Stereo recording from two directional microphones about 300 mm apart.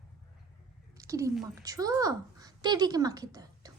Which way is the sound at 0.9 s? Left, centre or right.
Centre.